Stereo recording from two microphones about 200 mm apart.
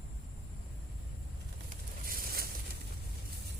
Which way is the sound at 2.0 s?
50° right (ahead or behind).